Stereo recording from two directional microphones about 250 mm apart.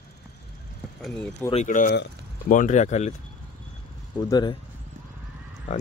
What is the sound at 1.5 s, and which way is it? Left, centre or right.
Speech, left.